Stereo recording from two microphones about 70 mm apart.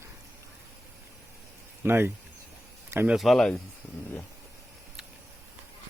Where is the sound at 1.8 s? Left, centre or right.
Right.